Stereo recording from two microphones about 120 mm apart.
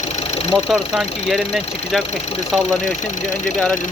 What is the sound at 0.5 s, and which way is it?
Speech, 5° right (ahead or behind).